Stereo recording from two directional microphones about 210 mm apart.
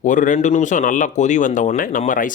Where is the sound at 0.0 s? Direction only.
35° left (ahead or behind).